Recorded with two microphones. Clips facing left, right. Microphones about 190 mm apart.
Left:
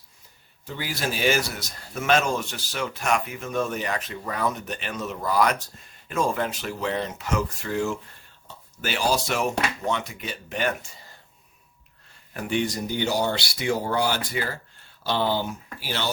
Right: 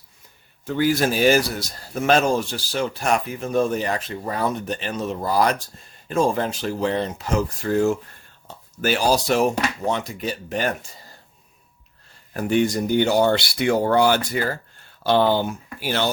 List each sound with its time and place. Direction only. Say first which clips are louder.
0.6 s speech: right 10 dB; 50° right (ahead or behind)
12.3 s speech: right 6 dB; 40° right (ahead or behind)